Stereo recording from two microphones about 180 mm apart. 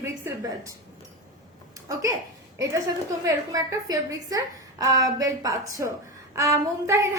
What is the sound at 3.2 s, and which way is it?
A woman's voice, 20° right (ahead or behind).